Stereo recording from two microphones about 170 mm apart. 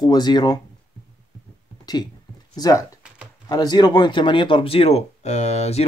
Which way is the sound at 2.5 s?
20° left (ahead or behind).